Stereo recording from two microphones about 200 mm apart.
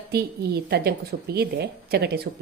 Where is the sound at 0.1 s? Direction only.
55° right (ahead or behind).